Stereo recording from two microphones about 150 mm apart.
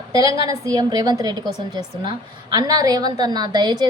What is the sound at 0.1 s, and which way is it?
A woman's voice, 25° right (ahead or behind).